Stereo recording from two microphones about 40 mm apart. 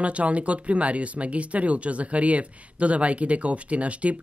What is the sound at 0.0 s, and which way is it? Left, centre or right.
Speech, right.